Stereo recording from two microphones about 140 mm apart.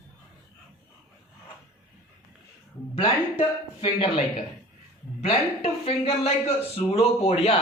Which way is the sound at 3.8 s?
45° left (ahead or behind).